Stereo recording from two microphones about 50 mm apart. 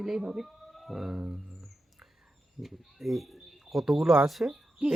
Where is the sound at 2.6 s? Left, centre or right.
Centre.